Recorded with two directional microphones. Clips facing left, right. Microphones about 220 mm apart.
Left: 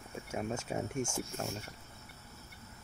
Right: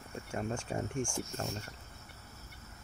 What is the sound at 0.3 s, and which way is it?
Speech, 5° left (ahead or behind).